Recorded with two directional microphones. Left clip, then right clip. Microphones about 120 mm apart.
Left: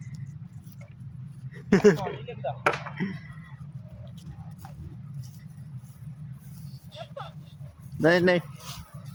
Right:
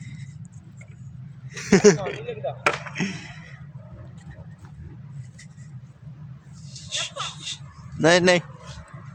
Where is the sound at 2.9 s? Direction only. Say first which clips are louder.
Right 6 dB; 35° right (ahead or behind).